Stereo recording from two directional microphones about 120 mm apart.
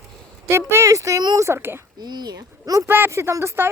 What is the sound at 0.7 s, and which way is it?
Speech, 25° right (ahead or behind).